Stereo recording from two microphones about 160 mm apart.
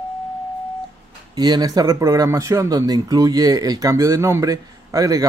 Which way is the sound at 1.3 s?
25° right (ahead or behind).